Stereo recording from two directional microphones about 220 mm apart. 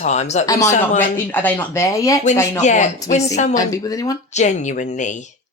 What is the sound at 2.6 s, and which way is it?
Speech, 30° left (ahead or behind).